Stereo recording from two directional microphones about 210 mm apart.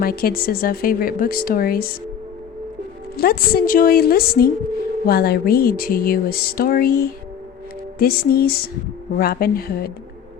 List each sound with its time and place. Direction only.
0.0 s speech: 45° left (ahead or behind)
3.2 s speech: 45° left (ahead or behind)